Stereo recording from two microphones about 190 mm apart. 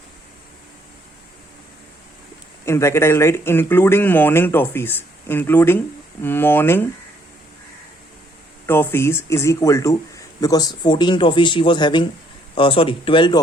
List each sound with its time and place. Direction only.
2.6 s speech: 15° left (ahead or behind)
8.6 s speech: 10° left (ahead or behind)